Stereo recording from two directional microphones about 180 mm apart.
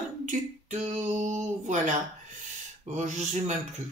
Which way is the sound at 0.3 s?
40° right (ahead or behind).